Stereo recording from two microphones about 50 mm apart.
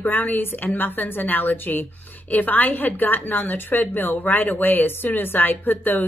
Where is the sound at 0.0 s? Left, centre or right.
Left.